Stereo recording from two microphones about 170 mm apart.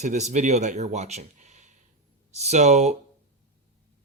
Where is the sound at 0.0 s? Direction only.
45° right (ahead or behind).